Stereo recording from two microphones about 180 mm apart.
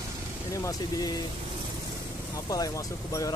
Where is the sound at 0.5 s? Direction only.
20° left (ahead or behind).